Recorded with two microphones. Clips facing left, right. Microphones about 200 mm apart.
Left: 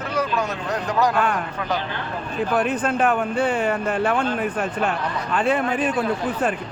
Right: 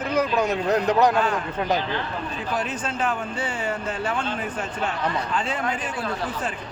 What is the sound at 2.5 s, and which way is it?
A woman's voice, 55° left (ahead or behind).